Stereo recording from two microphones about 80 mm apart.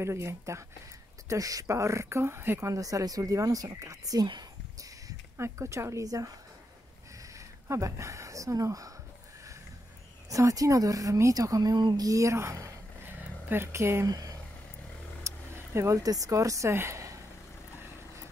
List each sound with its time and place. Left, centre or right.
0.0 s speech: right
2.7 s speech: right
5.4 s speech: right
7.3 s speech: right
10.3 s speech: right
13.0 s a sound: right
14.0 s speech: right
15.2 s speech: right
16.7 s a sound: right